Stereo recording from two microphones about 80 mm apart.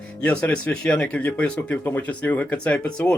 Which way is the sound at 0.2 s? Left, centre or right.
Centre.